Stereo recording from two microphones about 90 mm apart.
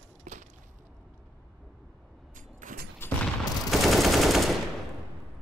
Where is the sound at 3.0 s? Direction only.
25° left (ahead or behind).